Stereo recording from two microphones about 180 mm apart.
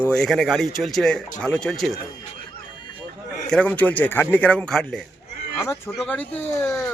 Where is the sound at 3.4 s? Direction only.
5° left (ahead or behind).